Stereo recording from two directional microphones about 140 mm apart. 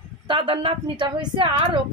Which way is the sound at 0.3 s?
40° right (ahead or behind).